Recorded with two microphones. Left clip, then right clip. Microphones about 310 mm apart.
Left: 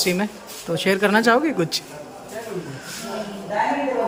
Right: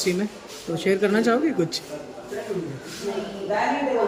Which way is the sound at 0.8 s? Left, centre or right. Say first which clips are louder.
Left 3 dB; centre.